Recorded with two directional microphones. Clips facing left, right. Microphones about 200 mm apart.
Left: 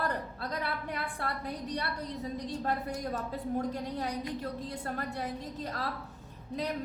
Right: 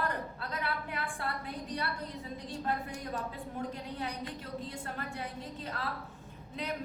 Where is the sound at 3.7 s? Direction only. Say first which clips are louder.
Left 4 dB; 40° left (ahead or behind).